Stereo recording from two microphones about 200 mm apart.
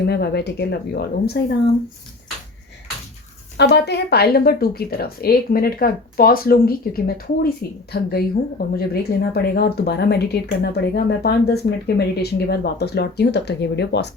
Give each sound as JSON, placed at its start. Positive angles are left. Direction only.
{"t": 0.1, "sound": "speech", "side_deg": 55}
{"t": 3.6, "sound": "speech", "side_deg": 55}